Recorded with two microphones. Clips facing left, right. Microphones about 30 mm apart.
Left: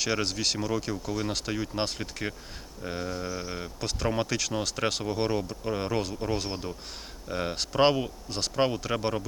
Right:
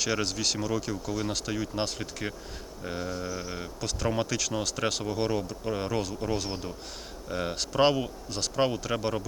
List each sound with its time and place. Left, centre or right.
0.0 s speech: centre
6.2 s speech: centre